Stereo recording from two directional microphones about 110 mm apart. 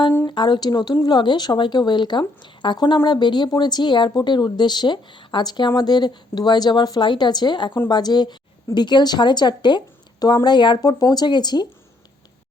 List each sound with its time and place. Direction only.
0.3 s a woman's voice: 45° left (ahead or behind)